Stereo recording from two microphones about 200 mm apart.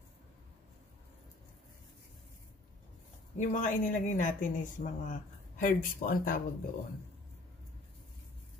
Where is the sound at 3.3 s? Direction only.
40° left (ahead or behind).